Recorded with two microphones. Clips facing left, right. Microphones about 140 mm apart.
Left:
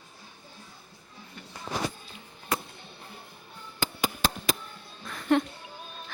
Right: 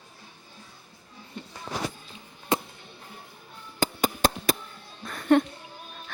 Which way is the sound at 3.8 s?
50° right (ahead or behind).